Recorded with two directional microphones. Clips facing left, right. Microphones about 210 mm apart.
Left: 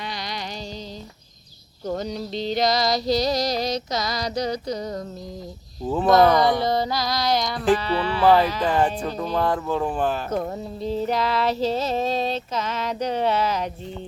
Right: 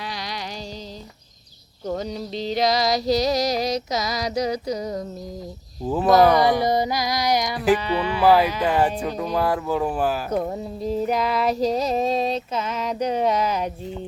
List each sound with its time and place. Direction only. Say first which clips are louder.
1.9 s music: even; 5° right (ahead or behind)